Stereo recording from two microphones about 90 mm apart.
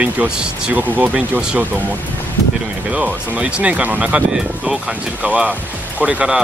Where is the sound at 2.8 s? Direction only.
10° right (ahead or behind).